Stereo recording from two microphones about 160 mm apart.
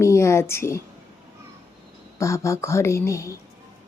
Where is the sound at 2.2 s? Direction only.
20° left (ahead or behind).